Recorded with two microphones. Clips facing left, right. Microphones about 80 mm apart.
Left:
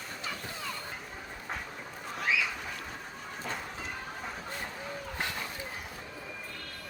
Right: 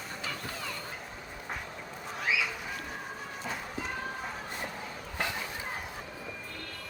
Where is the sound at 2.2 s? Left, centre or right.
Centre.